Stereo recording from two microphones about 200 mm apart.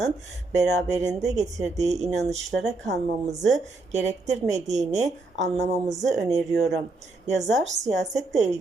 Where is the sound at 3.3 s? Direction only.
35° right (ahead or behind).